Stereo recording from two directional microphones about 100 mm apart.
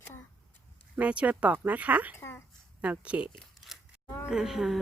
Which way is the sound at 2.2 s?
25° left (ahead or behind).